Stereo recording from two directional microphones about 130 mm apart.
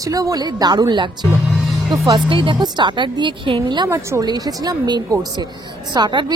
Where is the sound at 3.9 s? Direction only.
20° right (ahead or behind); by 6.3 s 35° right (ahead or behind).